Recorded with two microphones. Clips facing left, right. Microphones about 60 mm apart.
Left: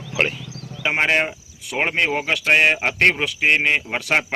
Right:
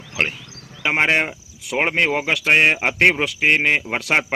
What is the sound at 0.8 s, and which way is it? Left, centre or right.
Speech, centre.